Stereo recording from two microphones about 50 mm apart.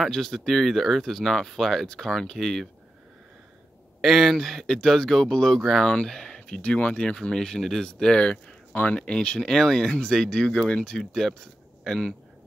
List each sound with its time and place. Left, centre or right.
0.0 s speech: centre
4.0 s speech: centre
6.6 s speech: left
7.2 s speech: centre
8.7 s speech: left
9.0 s speech: centre
11.1 s speech: centre